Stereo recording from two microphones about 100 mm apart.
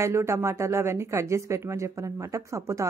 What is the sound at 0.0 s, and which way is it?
Speech, 30° right (ahead or behind).